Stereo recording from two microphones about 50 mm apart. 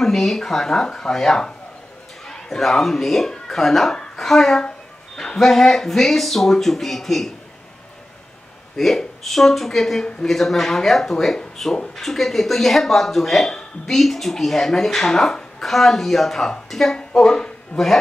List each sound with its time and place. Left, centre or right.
0.0 s speech: centre
4.6 s a sound: centre
5.4 s a man's voice: centre
8.7 s a man's voice: centre